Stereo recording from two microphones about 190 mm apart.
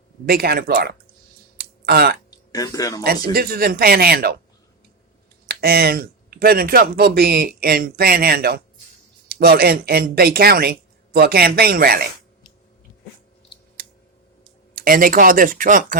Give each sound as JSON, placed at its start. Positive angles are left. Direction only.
{"t": 0.3, "sound": "speech", "side_deg": -50}
{"t": 1.5, "sound": "a sound", "side_deg": -55}
{"t": 2.3, "sound": "speech", "side_deg": 20}
{"t": 3.0, "sound": "speech", "side_deg": -55}
{"t": 5.5, "sound": "speech", "side_deg": -55}
{"t": 13.8, "sound": "a sound", "side_deg": -50}
{"t": 14.8, "sound": "speech", "side_deg": -50}